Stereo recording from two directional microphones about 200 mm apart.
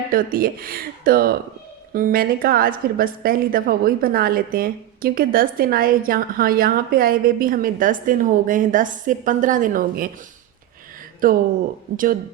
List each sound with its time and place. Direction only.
0.1 s a woman's voice: 45° right (ahead or behind)
11.2 s a woman's voice: 45° right (ahead or behind)